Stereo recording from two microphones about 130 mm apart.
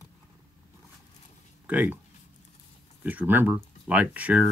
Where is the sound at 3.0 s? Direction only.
15° right (ahead or behind).